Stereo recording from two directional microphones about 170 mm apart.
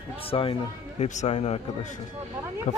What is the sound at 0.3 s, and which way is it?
Speech, 30° left (ahead or behind).